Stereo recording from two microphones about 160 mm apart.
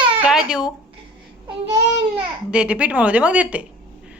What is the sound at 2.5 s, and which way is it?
Speech, 5° right (ahead or behind).